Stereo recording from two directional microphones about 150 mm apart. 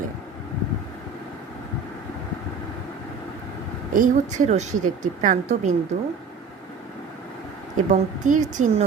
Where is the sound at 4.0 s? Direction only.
55° right (ahead or behind).